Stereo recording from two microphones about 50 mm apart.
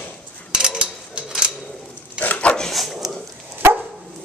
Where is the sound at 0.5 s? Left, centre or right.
Centre.